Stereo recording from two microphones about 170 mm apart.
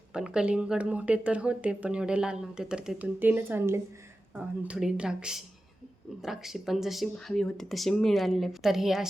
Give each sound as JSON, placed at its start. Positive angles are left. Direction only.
{"t": 0.1, "sound": "speech", "side_deg": -5}